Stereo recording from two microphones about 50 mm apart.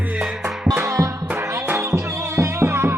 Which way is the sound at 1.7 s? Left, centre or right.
Right.